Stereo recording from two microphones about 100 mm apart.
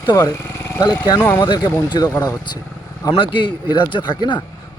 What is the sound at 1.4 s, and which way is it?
Speech, 50° left (ahead or behind).